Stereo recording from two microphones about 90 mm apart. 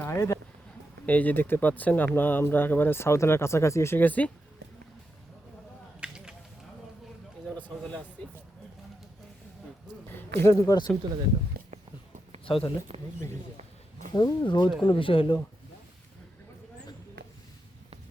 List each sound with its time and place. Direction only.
0.0 s speech: 30° left (ahead or behind)
1.0 s speech: 20° left (ahead or behind)
6.0 s a sound: 10° right (ahead or behind)
7.4 s a sound: 15° left (ahead or behind)
10.1 s a sound: 25° left (ahead or behind)
10.7 s speech: 45° left (ahead or behind)
12.5 s speech: 80° left
14.1 s speech: 55° left (ahead or behind)
14.8 s speech: 75° left (ahead or behind)